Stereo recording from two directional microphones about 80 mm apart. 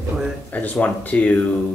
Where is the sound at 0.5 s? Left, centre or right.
Centre.